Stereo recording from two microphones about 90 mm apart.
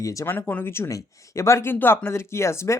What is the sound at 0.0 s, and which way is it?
Speech, 35° left (ahead or behind).